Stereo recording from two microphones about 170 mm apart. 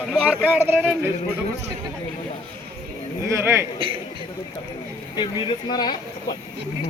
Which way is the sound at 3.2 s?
15° right (ahead or behind).